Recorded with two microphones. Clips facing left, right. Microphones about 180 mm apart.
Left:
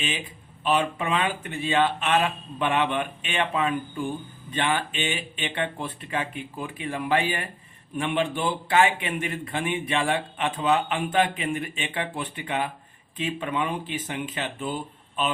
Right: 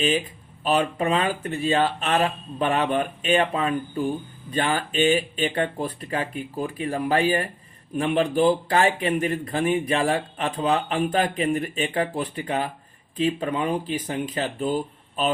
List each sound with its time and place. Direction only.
0.6 s speech: 40° right (ahead or behind)